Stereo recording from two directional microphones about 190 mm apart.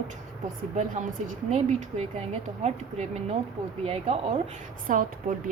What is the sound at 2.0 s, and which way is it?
Speech, 35° right (ahead or behind).